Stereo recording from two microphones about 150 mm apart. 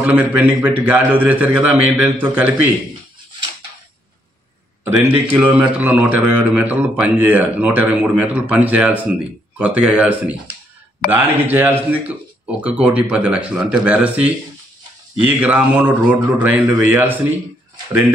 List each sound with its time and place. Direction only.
0.0 s a man's voice: 10° right (ahead or behind)
5.3 s a man's voice: 10° right (ahead or behind)